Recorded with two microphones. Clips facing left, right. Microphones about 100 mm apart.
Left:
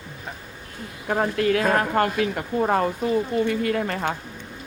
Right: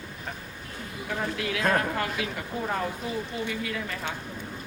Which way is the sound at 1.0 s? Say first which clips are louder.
Left 9 dB; 50° left (ahead or behind).